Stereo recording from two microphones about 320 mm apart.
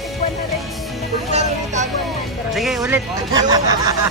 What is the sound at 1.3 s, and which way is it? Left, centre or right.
Speech, right.